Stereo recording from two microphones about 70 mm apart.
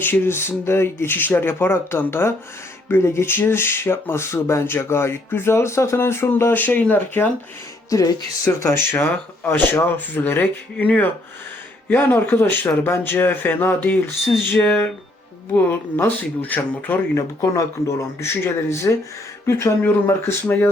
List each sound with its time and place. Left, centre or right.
0.0 s speech: left
7.9 s music: left
8.6 s speech: left
9.0 s speech: left
17.2 s speech: left
19.8 s speech: left